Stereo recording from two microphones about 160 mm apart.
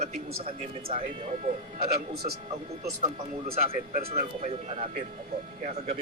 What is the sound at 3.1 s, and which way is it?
Speech, 40° right (ahead or behind).